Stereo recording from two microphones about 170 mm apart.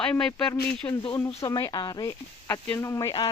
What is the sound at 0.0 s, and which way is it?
Speech, 5° left (ahead or behind).